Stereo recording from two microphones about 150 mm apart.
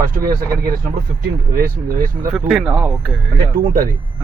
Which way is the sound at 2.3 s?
Centre (ahead or behind).